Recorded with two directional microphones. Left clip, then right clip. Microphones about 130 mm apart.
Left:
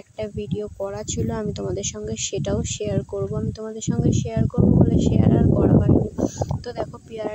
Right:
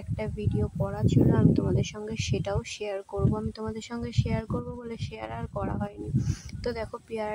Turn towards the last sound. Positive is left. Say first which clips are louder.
# left 3 dB
turn(degrees=15)  # may be behind; listen again after turning